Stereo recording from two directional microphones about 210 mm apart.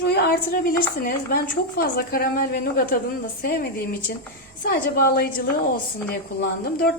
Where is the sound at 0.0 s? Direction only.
45° left (ahead or behind).